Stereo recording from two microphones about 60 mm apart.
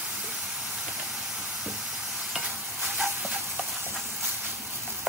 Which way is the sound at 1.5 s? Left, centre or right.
Centre.